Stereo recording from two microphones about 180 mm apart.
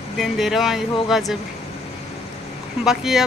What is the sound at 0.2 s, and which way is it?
Speech, centre (ahead or behind).